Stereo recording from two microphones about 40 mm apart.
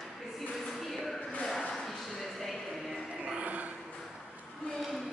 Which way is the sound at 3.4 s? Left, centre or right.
Right.